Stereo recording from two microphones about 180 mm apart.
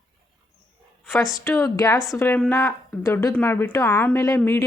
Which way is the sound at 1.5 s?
15° left (ahead or behind).